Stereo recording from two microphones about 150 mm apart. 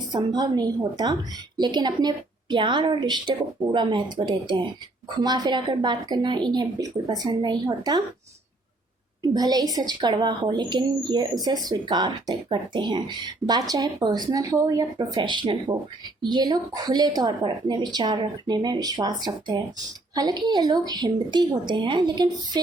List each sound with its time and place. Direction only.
0.1 s a woman's voice: 30° right (ahead or behind)
9.3 s speech: 25° right (ahead or behind)